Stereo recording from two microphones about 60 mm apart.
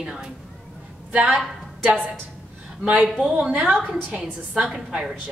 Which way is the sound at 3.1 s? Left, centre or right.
Centre.